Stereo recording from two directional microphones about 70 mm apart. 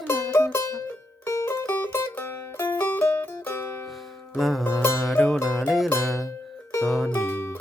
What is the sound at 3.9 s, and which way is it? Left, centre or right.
Music, centre.